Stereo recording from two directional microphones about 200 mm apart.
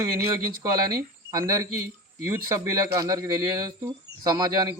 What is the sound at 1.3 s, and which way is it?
Speech, 15° right (ahead or behind).